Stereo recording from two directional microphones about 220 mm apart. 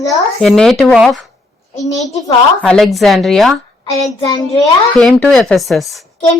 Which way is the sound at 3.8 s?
15° left (ahead or behind).